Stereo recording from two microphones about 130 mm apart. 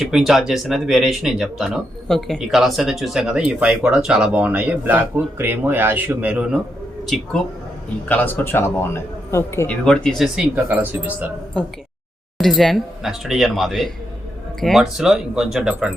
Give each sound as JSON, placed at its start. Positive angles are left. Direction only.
{"t": 0.0, "sound": "speech", "side_deg": -5}
{"t": 8.0, "sound": "a man's voice", "side_deg": 15}
{"t": 9.6, "sound": "speech", "side_deg": 5}
{"t": 10.3, "sound": "speech", "side_deg": -10}
{"t": 12.4, "sound": "speech", "side_deg": 0}